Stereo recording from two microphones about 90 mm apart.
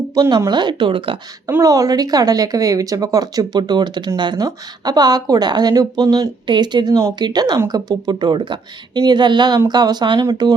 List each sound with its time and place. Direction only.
0.1 s speech: 50° right (ahead or behind); by 1.2 s 70° right (ahead or behind)
1.6 s speech: 40° right (ahead or behind)
3.6 s speech: 55° right (ahead or behind)